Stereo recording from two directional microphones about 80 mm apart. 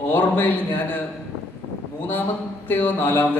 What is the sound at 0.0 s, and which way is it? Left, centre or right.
A man's voice, left.